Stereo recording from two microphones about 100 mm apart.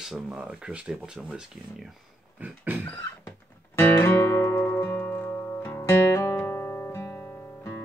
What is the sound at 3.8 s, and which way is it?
Music, 25° left (ahead or behind).